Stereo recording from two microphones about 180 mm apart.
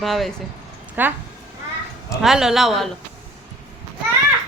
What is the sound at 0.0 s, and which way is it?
Speech, centre (ahead or behind).